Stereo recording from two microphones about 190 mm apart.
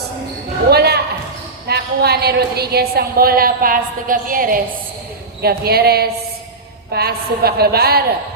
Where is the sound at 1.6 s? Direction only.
55° right (ahead or behind).